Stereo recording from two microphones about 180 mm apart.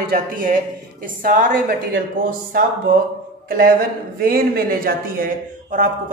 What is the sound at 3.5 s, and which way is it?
A man's voice, 55° right (ahead or behind).